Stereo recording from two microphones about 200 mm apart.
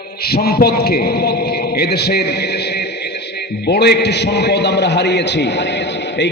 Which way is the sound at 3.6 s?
55° left (ahead or behind).